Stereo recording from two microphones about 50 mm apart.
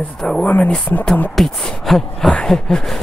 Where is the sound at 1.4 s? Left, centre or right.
Centre.